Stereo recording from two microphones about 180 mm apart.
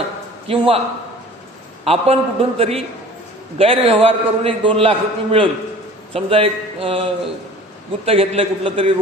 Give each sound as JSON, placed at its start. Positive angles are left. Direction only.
{"t": 0.4, "sound": "a man's voice", "side_deg": -30}
{"t": 1.8, "sound": "a man's voice", "side_deg": -35}